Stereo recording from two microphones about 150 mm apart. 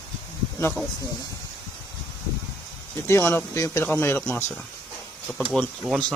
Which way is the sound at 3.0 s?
20° left (ahead or behind).